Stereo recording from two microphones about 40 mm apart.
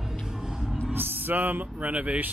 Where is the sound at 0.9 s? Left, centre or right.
Right.